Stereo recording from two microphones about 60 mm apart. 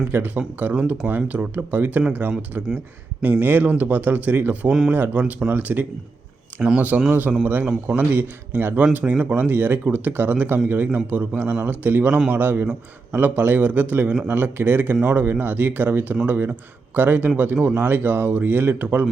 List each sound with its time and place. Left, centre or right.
0.1 s speech: right